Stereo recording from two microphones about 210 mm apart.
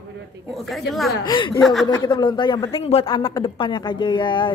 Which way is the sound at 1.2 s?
20° left (ahead or behind).